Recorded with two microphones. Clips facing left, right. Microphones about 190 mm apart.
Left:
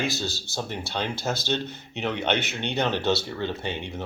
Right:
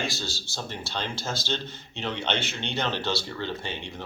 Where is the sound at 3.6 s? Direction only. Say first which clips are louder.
Left 4 dB; 60° left (ahead or behind).